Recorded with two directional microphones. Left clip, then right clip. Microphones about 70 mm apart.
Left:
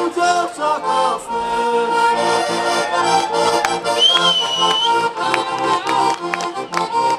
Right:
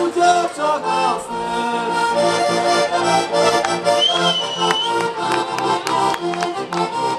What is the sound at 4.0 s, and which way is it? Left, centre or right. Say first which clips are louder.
Music: left 3 dB; left.